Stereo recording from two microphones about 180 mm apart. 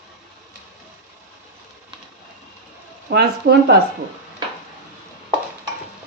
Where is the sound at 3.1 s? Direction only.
60° right (ahead or behind).